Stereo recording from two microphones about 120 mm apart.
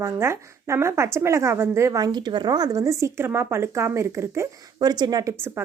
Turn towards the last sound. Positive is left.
turn(degrees=-35)  # may be behind; listen again after turning